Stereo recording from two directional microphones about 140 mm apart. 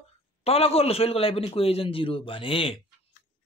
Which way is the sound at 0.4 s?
45° left (ahead or behind).